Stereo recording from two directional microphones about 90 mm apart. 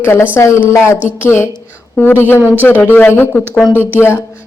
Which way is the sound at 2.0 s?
25° left (ahead or behind).